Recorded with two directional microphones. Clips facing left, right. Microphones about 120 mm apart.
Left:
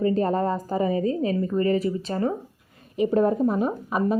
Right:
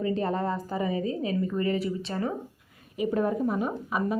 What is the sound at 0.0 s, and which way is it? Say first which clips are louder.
Speech: left 5 dB; 40° left (ahead or behind).